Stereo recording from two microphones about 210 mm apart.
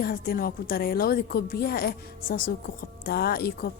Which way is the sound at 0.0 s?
45° left (ahead or behind).